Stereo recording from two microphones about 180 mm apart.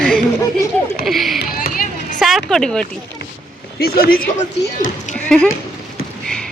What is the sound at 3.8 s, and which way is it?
Speech, 55° left (ahead or behind).